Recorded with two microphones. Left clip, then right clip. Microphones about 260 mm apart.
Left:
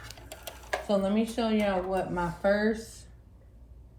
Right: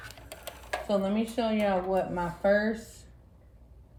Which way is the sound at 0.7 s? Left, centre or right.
Centre.